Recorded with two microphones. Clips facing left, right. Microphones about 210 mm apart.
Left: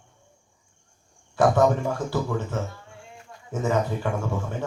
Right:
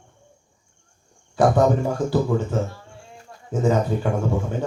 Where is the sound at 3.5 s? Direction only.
20° right (ahead or behind).